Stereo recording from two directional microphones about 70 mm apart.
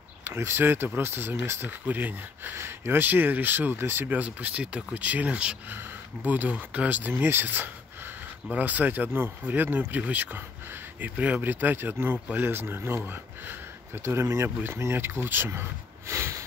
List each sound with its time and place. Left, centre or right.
0.2 s speech: right
2.5 s speech: right
4.2 s speech: right
16.1 s a sound: right